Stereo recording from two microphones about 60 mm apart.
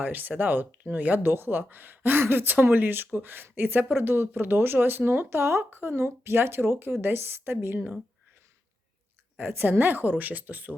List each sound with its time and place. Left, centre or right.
0.0 s speech: right
9.4 s speech: right